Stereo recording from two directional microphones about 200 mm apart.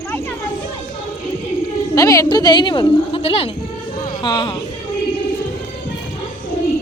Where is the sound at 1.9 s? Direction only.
15° left (ahead or behind).